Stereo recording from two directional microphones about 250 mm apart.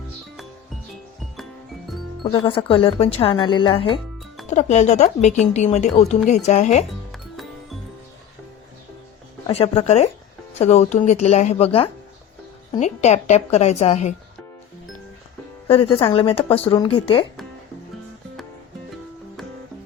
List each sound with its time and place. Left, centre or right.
2.2 s speech: left
9.5 s speech: left
15.6 s speech: left